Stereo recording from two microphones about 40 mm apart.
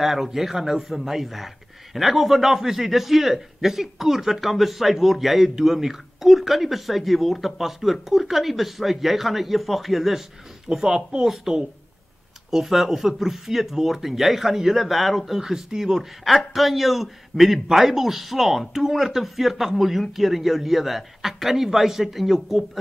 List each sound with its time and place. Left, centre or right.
0.0 s a man's voice: centre